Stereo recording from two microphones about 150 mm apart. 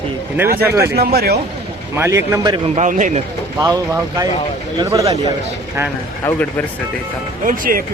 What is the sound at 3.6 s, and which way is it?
Speech, 25° right (ahead or behind).